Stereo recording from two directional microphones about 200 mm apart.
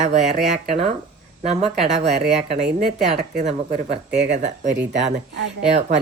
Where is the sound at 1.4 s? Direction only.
30° right (ahead or behind).